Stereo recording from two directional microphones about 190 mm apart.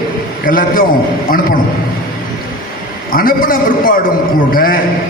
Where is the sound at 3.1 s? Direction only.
50° left (ahead or behind).